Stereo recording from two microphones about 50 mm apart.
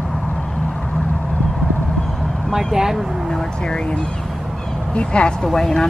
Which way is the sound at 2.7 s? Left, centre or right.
Centre.